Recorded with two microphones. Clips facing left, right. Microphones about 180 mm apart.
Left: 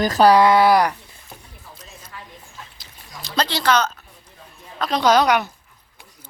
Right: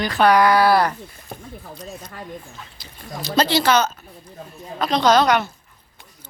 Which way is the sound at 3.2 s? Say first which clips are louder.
Right 3 dB; 5° right (ahead or behind).